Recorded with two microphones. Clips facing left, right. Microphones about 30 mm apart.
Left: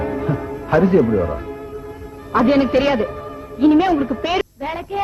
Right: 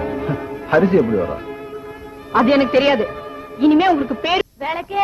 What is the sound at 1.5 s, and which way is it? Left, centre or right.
Music, right.